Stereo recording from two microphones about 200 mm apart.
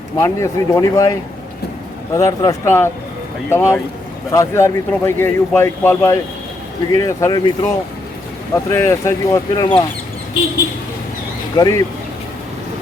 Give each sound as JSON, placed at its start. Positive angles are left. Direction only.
{"t": 0.2, "sound": "speech", "side_deg": 15}
{"t": 2.1, "sound": "speech", "side_deg": 15}
{"t": 8.7, "sound": "speech", "side_deg": 15}
{"t": 11.5, "sound": "speech", "side_deg": 20}